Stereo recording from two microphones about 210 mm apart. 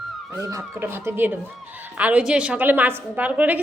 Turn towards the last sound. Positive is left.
turn(degrees=-5)  # may be behind; listen again after turning